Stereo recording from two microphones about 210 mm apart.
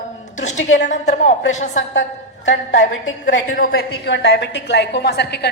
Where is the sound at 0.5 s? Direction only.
65° left (ahead or behind).